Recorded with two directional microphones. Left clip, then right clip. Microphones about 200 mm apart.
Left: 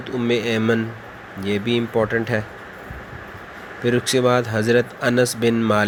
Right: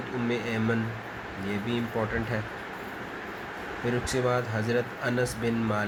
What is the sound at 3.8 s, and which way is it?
Speech, 45° left (ahead or behind).